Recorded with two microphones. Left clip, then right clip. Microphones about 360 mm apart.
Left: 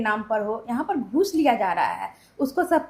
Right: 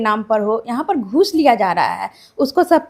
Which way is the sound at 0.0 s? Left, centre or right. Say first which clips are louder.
Right 7 dB; right.